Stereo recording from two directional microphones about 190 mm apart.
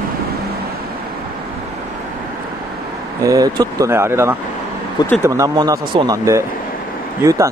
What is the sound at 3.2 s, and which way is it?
Speech, 20° right (ahead or behind).